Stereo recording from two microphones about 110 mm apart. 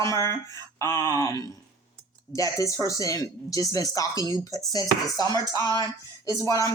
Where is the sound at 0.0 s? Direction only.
30° left (ahead or behind).